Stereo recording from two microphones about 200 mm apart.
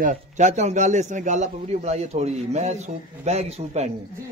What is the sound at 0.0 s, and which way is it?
A man's voice, 40° right (ahead or behind).